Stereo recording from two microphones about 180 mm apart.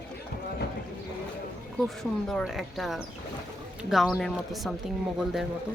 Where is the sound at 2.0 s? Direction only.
Centre (ahead or behind).